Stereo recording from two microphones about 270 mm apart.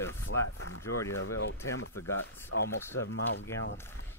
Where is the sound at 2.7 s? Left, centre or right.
Centre.